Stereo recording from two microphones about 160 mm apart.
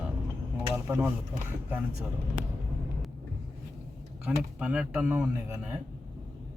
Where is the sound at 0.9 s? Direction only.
10° right (ahead or behind).